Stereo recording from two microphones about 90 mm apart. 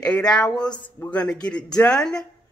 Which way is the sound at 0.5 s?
50° left (ahead or behind).